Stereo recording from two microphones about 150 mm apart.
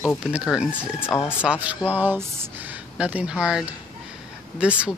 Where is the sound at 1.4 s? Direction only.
10° right (ahead or behind).